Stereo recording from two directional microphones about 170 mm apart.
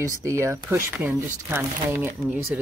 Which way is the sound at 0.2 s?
15° right (ahead or behind).